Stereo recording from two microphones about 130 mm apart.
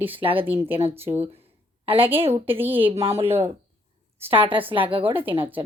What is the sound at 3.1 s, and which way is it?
Speech, 20° right (ahead or behind).